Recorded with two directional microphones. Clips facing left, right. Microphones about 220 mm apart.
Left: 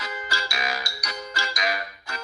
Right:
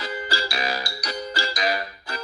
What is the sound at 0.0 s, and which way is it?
Music, 35° right (ahead or behind).